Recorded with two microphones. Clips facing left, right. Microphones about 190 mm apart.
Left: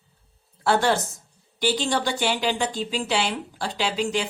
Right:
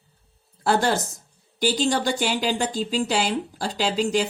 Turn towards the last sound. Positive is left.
turn(degrees=-40)  # may be behind; listen again after turning